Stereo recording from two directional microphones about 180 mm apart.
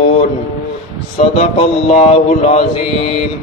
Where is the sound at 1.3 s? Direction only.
35° left (ahead or behind).